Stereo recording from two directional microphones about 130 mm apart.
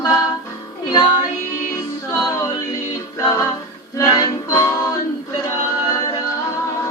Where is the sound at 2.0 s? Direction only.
25° left (ahead or behind).